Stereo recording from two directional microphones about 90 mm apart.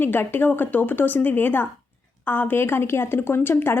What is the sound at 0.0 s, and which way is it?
Speech, 25° left (ahead or behind).